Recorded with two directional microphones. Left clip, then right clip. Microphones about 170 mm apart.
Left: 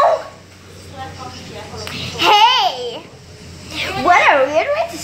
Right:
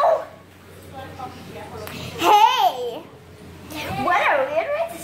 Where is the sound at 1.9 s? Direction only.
10° right (ahead or behind).